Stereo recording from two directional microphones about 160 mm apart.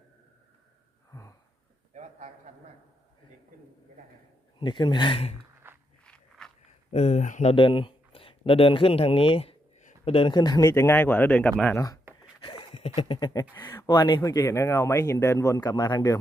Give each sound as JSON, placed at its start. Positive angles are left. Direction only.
{"t": 1.1, "sound": "wheeze", "side_deg": 20}
{"t": 1.9, "sound": "a sound", "side_deg": -45}
{"t": 4.6, "sound": "speech", "side_deg": 30}
{"t": 5.6, "sound": "walk", "side_deg": -15}
{"t": 6.1, "sound": "walk", "side_deg": 5}
{"t": 6.9, "sound": "speech", "side_deg": 45}
{"t": 7.5, "sound": "speech", "side_deg": 30}
{"t": 10.7, "sound": "speech", "side_deg": 15}
{"t": 12.1, "sound": "a sound", "side_deg": -15}
{"t": 12.4, "sound": "a sound", "side_deg": 30}
{"t": 13.0, "sound": "speech", "side_deg": 30}